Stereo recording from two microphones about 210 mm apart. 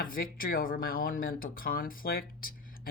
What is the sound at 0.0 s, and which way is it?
Speech, 45° left (ahead or behind).